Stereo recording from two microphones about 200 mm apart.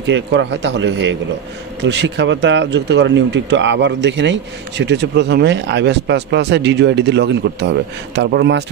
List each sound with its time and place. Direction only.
0.0 s speech: 65° right (ahead or behind)